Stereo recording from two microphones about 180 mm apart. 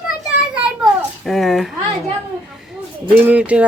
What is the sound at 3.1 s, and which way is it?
Speech, 10° right (ahead or behind).